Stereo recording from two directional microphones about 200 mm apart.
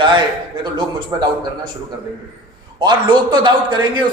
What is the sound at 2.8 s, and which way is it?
A man's voice, 20° right (ahead or behind).